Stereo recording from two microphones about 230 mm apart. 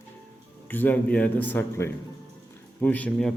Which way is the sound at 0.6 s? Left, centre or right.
Centre.